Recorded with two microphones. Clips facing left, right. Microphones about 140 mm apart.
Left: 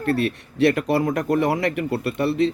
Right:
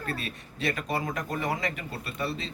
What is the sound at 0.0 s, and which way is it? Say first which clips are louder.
Speech: left 13 dB; 65° left (ahead or behind).